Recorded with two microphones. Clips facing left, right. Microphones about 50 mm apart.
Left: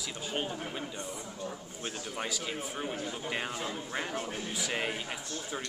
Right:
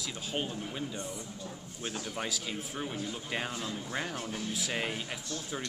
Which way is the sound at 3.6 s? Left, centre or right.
Left.